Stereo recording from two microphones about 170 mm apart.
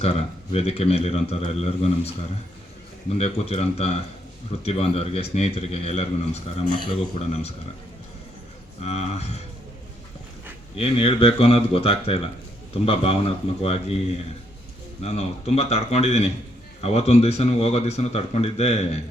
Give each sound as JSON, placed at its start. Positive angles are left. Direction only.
{"t": 0.0, "sound": "a man's voice", "side_deg": 40}
{"t": 8.8, "sound": "a man's voice", "side_deg": 40}
{"t": 10.8, "sound": "a man's voice", "side_deg": 35}
{"t": 15.0, "sound": "a man's voice", "side_deg": 40}